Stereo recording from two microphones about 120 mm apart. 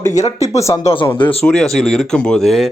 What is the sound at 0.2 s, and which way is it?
Speech, 65° left (ahead or behind).